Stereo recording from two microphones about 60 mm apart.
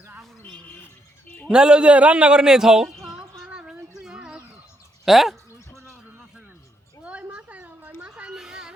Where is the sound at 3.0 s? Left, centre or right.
Centre.